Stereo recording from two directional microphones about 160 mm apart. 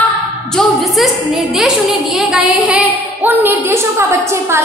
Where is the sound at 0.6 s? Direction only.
Centre (ahead or behind).